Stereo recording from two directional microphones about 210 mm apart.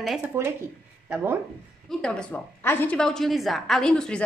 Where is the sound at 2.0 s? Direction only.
5° left (ahead or behind).